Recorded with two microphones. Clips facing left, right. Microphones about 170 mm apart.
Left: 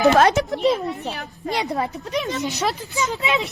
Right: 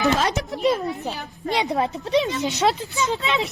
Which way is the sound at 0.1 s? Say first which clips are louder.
Left 6 dB; 60° left (ahead or behind).